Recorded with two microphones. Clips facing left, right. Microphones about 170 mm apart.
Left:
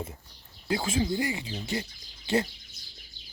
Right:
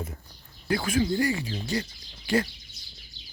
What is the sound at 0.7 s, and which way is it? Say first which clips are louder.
Speech: right 2 dB; 25° left (ahead or behind).